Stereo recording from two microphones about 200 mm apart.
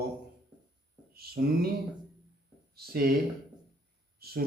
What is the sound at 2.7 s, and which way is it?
Speech, 50° right (ahead or behind).